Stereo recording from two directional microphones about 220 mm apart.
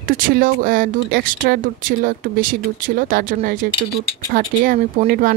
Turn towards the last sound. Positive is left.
turn(degrees=-40)  # may be behind; listen again after turning